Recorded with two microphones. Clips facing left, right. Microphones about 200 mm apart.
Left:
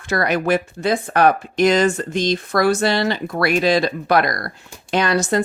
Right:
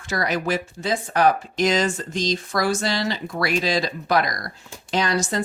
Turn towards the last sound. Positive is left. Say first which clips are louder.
# left 5 dB
turn(degrees=60)  # may be behind; listen again after turning